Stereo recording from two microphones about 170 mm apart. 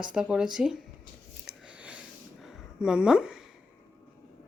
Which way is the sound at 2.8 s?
5° right (ahead or behind).